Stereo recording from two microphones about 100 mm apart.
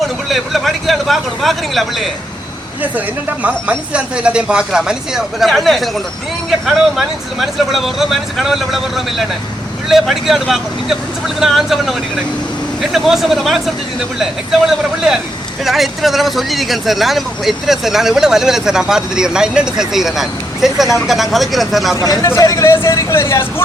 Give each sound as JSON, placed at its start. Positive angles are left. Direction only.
{"t": 0.3, "sound": "speech", "side_deg": 0}
{"t": 2.8, "sound": "speech", "side_deg": -15}
{"t": 14.7, "sound": "speech", "side_deg": -5}
{"t": 21.9, "sound": "speech", "side_deg": 35}